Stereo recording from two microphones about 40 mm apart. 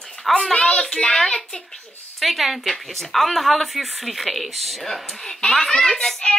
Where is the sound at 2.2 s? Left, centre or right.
Centre.